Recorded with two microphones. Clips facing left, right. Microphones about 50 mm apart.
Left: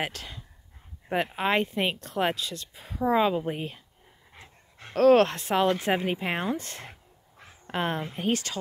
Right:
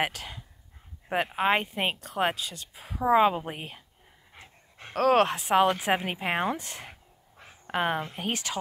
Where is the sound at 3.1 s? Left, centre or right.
Centre.